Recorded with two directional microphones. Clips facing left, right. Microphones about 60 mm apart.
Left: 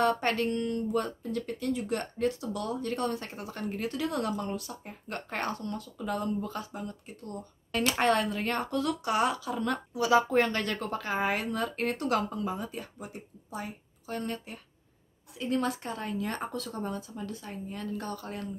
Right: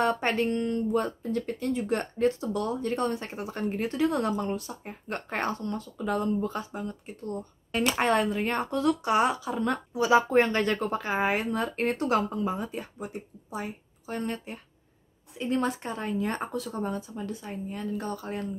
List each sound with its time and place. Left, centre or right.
0.0 s a woman's voice: right